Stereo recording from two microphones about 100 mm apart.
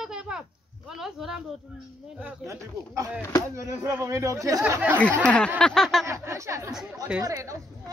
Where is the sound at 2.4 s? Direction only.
30° right (ahead or behind).